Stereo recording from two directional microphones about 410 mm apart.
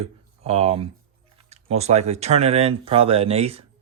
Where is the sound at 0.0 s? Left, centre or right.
Centre.